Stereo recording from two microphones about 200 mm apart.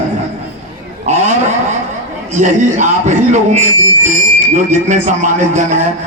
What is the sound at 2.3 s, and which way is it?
Speech, 40° right (ahead or behind).